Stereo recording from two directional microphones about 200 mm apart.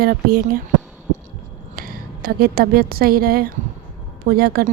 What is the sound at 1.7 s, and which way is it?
A woman's voice, 45° right (ahead or behind).